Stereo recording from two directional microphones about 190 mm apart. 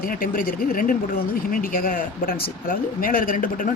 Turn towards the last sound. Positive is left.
turn(degrees=45)  # may be behind; listen again after turning